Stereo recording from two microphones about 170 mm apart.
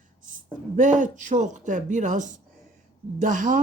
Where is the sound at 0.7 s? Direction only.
50° right (ahead or behind).